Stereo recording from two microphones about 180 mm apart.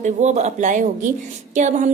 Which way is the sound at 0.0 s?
40° right (ahead or behind).